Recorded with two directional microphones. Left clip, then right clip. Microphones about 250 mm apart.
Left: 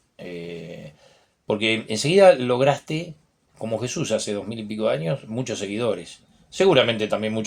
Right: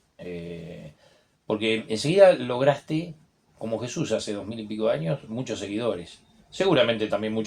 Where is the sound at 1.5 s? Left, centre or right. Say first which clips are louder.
Left 3 dB; left.